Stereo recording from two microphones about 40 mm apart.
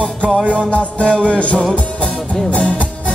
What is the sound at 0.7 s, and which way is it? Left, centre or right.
Music, left.